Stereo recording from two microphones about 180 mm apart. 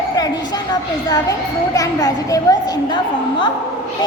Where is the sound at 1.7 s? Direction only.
20° left (ahead or behind).